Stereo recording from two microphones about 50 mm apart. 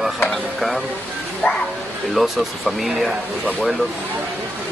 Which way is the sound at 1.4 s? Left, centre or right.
Left.